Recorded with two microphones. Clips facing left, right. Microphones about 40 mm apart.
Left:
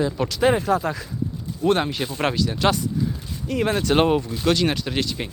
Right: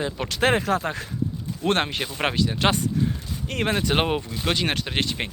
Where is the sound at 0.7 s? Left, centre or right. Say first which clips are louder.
Left 2 dB; right.